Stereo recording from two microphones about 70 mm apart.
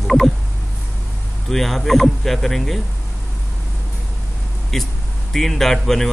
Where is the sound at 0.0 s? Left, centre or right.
Centre.